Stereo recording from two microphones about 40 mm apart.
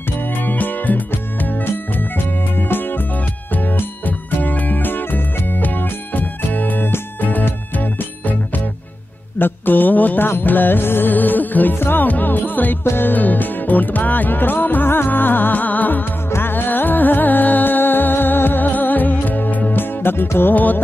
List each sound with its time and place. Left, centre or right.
0.5 s music: left
2.0 s music: left
4.0 s music: left
9.4 s mantra: left
10.2 s music: left
16.3 s music: left
19.7 s music: left
20.5 s music: left